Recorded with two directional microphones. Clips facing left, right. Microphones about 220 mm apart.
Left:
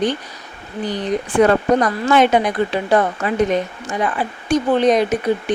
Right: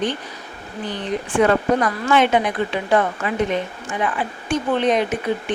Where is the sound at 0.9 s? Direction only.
40° left (ahead or behind).